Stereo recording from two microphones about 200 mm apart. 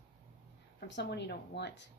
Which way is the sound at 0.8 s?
60° left (ahead or behind).